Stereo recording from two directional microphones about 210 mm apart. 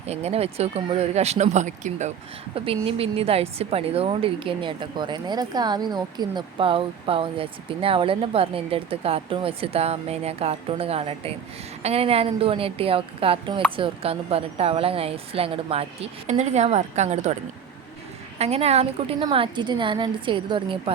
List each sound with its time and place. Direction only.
0.1 s a woman's voice: 30° right (ahead or behind)
18.3 s a woman's voice: 30° right (ahead or behind)